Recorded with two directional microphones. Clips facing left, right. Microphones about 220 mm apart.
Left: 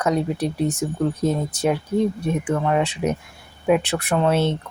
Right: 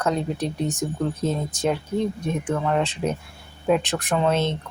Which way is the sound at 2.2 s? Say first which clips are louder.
Left 3 dB; 10° left (ahead or behind).